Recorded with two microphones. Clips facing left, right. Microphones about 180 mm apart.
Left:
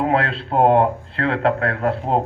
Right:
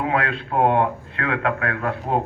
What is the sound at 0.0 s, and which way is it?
A man's voice, 35° left (ahead or behind).